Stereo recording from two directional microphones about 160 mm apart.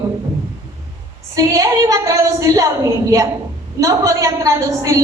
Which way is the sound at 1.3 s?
20° right (ahead or behind).